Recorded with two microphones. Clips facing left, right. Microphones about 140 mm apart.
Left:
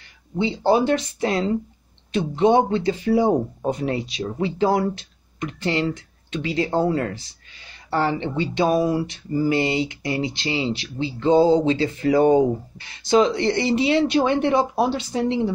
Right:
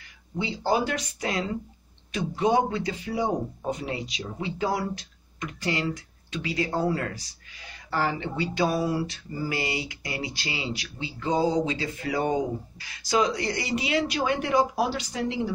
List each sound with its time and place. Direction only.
0.4 s speech: 25° left (ahead or behind); by 4.0 s 45° left (ahead or behind)
4.2 s speech: 30° left (ahead or behind)
12.7 s speech: 25° left (ahead or behind)